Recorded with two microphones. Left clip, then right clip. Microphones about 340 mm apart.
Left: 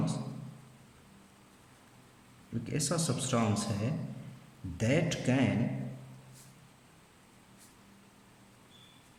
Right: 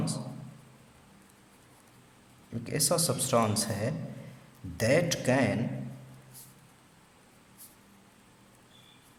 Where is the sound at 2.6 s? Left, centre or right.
Centre.